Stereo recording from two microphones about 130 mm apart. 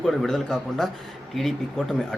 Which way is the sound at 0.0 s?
Centre (ahead or behind).